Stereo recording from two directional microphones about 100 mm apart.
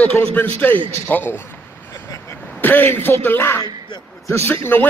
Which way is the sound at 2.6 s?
20° left (ahead or behind).